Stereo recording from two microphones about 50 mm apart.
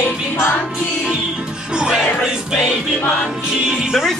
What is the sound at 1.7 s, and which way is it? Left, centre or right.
Speech, centre.